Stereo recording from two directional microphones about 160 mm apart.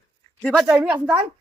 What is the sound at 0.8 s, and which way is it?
Speech, 10° right (ahead or behind).